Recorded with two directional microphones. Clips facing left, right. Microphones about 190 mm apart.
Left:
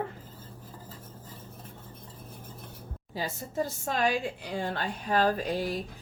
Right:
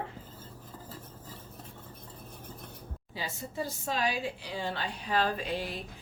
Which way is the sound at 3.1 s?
45° left (ahead or behind).